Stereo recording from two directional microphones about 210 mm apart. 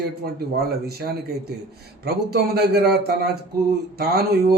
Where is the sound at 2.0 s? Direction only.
50° right (ahead or behind).